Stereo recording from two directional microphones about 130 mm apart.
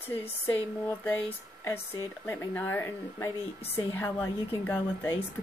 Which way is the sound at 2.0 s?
20° left (ahead or behind).